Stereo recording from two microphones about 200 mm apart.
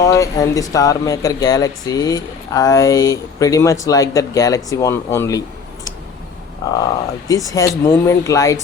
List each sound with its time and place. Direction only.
0.0 s speech: 15° left (ahead or behind)
6.6 s speech: 15° left (ahead or behind)